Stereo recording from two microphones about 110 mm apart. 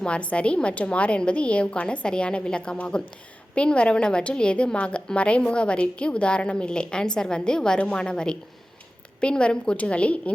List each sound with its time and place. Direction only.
0.0 s a woman's voice: 10° left (ahead or behind)